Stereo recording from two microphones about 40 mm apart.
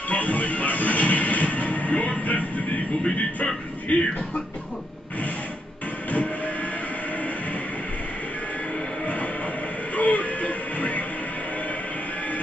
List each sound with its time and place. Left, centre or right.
0.1 s music: left
3.9 s music: left
6.1 s train: left
9.0 s music: left